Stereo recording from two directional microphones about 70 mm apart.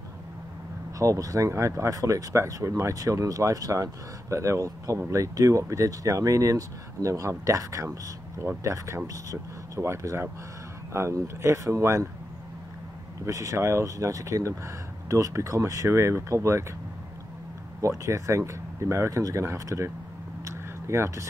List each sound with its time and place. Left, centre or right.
0.9 s speech: right
13.2 s speech: right
17.8 s speech: right
20.4 s a sound: right